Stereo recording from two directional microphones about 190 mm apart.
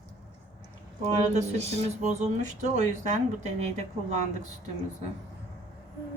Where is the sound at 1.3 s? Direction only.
35° right (ahead or behind).